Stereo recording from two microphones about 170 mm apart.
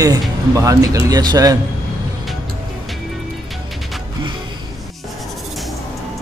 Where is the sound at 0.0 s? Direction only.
20° right (ahead or behind).